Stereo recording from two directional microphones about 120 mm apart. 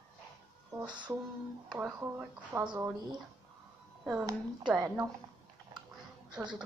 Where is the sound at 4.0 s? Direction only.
10° right (ahead or behind).